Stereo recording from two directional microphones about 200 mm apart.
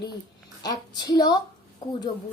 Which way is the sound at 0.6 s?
20° left (ahead or behind).